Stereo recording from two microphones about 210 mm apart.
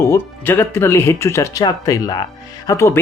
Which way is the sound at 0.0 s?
10° left (ahead or behind).